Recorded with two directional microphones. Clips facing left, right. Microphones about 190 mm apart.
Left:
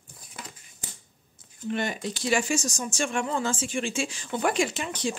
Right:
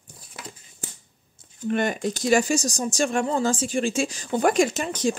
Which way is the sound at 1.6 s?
50° right (ahead or behind).